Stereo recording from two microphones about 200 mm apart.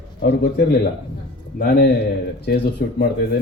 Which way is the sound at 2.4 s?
55° left (ahead or behind).